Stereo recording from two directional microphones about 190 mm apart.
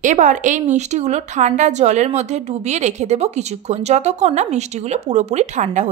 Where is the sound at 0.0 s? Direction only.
40° right (ahead or behind).